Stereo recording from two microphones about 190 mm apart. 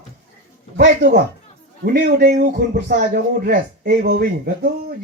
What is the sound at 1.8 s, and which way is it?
A man's voice, 55° right (ahead or behind).